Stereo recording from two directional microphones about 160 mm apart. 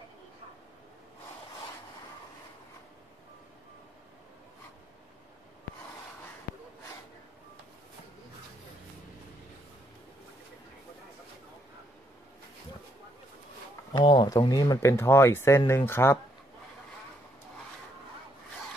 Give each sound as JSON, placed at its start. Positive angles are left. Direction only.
{"t": 13.9, "sound": "speech", "side_deg": 25}